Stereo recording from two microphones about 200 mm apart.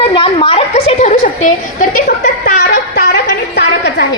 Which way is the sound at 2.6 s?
50° left (ahead or behind).